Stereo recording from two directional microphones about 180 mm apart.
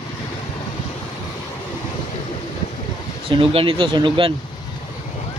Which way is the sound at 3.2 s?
30° right (ahead or behind).